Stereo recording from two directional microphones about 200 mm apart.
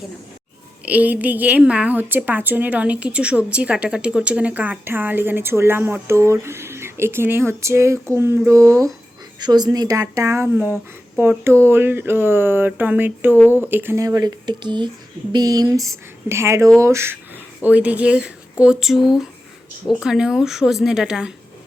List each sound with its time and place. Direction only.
0.9 s a woman's voice: 10° right (ahead or behind)